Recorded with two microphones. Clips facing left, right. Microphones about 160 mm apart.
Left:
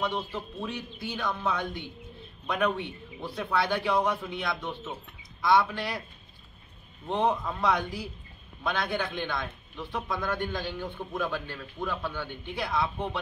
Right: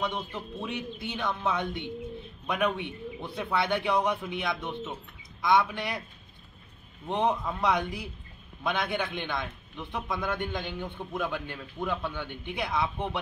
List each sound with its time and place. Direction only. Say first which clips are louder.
0.0 s a man's voice: left 1 dB; 15° right (ahead or behind)
7.1 s a man's voice: even; 15° right (ahead or behind)